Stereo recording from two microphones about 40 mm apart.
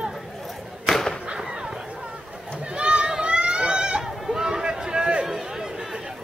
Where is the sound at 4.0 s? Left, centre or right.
Centre.